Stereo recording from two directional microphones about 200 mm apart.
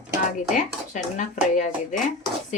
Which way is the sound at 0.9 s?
35° left (ahead or behind).